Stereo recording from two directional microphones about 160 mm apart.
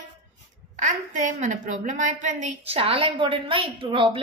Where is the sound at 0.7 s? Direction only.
50° right (ahead or behind).